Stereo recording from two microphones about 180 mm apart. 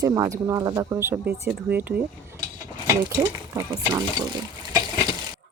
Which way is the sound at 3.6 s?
20° right (ahead or behind).